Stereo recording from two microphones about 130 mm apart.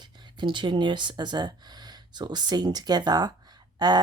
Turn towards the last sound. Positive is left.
turn(degrees=-30)  # may be behind; listen again after turning